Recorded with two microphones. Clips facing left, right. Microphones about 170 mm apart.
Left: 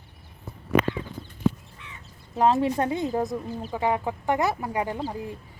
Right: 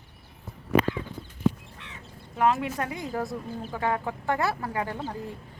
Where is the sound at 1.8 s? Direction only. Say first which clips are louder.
Left 1 dB; 85° right.